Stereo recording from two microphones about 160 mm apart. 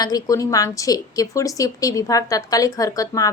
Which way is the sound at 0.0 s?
20° left (ahead or behind).